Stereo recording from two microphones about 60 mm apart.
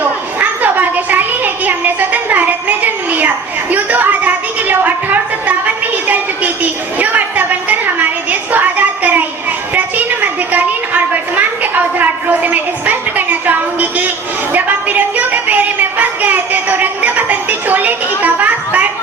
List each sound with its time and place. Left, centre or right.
0.0 s children playing: right
1.6 s a sound: right
14.5 s child singing: right
18.2 s children playing: right